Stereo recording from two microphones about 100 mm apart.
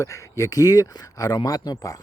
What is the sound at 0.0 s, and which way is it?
Speech, 30° left (ahead or behind).